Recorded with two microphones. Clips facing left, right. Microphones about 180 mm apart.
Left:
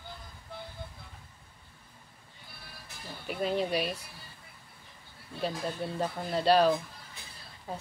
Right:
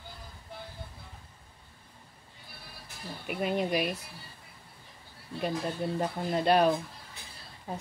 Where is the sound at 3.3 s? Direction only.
5° right (ahead or behind).